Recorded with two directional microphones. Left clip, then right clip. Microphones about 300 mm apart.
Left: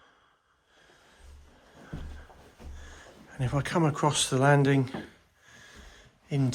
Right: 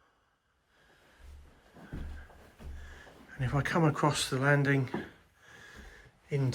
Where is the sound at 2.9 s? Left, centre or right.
Centre.